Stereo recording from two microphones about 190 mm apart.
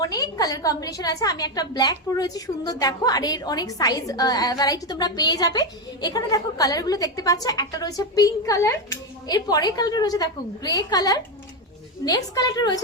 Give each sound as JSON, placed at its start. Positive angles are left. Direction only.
{"t": 0.0, "sound": "a woman's voice", "side_deg": 20}